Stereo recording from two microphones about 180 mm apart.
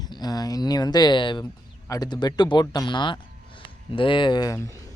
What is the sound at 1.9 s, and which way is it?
Speech, 25° left (ahead or behind).